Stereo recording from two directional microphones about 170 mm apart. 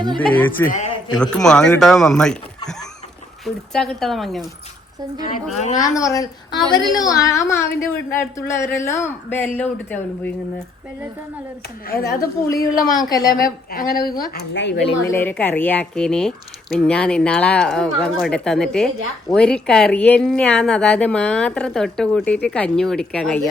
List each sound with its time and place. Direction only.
0.2 s a woman's voice: 10° left (ahead or behind)
3.4 s speech: 5° left (ahead or behind)
5.5 s a woman's voice: 40° left (ahead or behind)
6.0 s a woman's voice: 20° left (ahead or behind)
11.9 s speech: 60° left (ahead or behind)
13.0 s a woman's voice: 20° left (ahead or behind)
13.3 s speech: 60° left (ahead or behind)
14.5 s a woman's voice: 90° left
15.0 s speech: 10° left (ahead or behind)